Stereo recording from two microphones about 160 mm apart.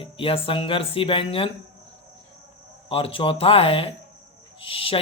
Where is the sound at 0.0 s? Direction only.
35° left (ahead or behind).